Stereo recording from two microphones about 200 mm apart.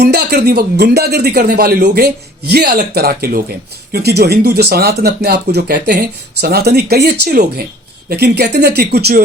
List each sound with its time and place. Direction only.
0.0 s speech: 55° right (ahead or behind)